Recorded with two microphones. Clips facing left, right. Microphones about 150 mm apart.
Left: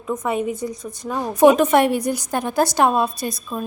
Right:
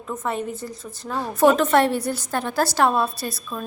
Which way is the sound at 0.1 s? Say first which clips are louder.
Left 5 dB; 10° left (ahead or behind).